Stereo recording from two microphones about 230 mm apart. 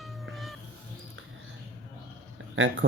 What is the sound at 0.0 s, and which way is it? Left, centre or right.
Cat, centre.